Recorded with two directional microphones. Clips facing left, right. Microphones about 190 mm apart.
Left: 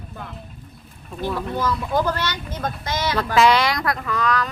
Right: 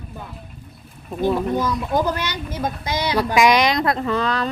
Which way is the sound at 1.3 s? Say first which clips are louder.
Right 3 dB; 15° right (ahead or behind).